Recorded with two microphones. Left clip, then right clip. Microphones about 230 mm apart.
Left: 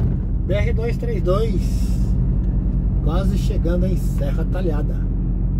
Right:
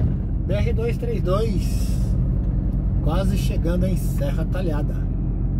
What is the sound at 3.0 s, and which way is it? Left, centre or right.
Speech, centre.